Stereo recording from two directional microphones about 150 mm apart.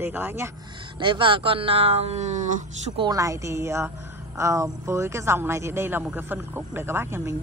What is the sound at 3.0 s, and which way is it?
A woman's voice, 25° right (ahead or behind).